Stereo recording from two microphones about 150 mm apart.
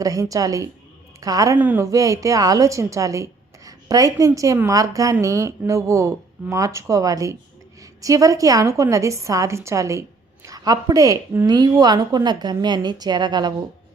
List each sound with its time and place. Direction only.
0.0 s a woman's voice: 25° right (ahead or behind)
1.5 s a woman's voice: 10° right (ahead or behind); by 13.5 s 30° right (ahead or behind)